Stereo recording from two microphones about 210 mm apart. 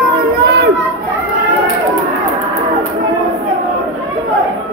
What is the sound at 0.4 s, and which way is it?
Run, 50° right (ahead or behind).